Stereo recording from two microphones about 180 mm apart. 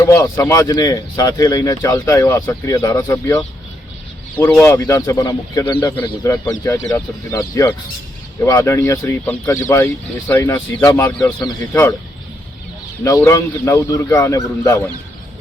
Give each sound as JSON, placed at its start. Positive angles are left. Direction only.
{"t": 0.0, "sound": "speech", "side_deg": 20}
{"t": 4.4, "sound": "speech", "side_deg": 10}
{"t": 13.1, "sound": "speech", "side_deg": 15}